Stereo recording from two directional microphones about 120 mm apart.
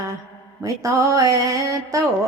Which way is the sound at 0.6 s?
25° right (ahead or behind).